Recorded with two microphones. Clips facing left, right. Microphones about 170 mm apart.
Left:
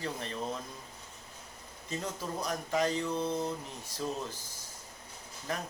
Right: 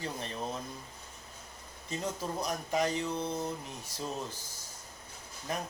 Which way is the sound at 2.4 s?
15° right (ahead or behind).